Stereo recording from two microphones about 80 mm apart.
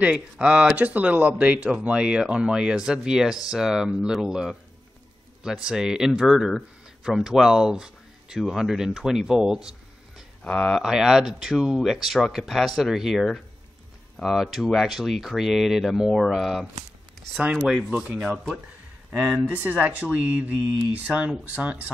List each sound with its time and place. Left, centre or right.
0.0 s speech: centre
10.4 s speech: centre
10.8 s speech: centre
19.4 s speech: right